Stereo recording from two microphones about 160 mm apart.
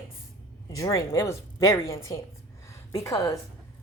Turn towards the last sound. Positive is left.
turn(degrees=20)  # may be behind; listen again after turning